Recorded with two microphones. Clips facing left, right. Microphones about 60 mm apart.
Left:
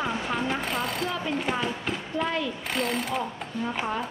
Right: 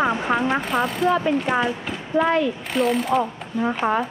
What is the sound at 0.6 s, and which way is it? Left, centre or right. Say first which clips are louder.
Speech: right 6 dB; centre.